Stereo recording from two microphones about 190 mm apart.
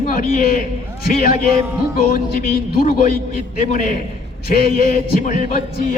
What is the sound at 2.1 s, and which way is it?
A man's voice, 45° left (ahead or behind).